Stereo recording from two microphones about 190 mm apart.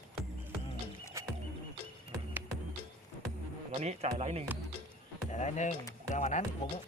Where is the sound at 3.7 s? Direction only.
35° right (ahead or behind).